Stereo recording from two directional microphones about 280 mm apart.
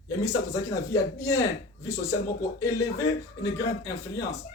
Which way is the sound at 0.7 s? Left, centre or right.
Centre.